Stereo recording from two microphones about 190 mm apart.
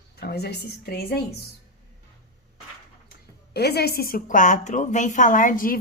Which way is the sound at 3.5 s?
60° left (ahead or behind).